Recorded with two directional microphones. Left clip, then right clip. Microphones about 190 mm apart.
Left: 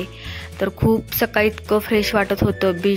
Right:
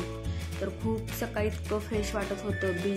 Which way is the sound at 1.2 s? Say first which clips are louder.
Left 14 dB; 50° left (ahead or behind).